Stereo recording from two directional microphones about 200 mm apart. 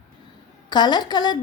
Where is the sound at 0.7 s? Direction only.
20° left (ahead or behind).